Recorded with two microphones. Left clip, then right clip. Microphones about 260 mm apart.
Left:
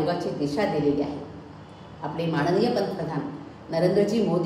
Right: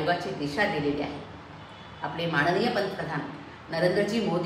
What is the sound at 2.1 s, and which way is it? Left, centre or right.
A woman's voice, right.